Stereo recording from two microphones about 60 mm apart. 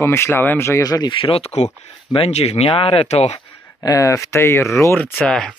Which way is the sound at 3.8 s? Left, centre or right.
Left.